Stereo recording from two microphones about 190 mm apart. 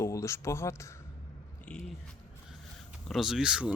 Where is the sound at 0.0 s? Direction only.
15° left (ahead or behind).